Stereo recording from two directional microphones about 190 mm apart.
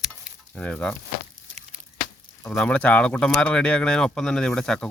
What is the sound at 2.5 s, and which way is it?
Speech, 5° left (ahead or behind).